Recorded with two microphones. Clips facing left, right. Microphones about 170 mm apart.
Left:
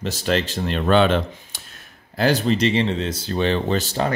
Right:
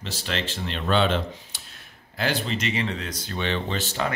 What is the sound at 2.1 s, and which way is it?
Speech, 40° left (ahead or behind).